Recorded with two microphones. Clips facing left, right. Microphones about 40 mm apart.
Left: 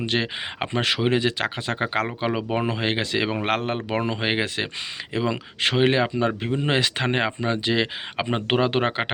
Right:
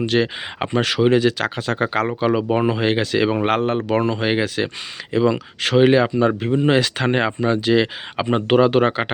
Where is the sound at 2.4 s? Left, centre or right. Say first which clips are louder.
Right 6 dB; centre.